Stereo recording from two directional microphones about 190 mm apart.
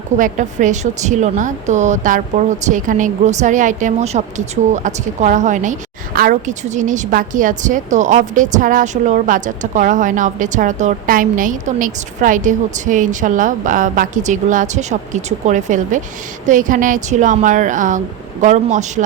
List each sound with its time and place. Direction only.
0.2 s a woman's voice: 40° right (ahead or behind)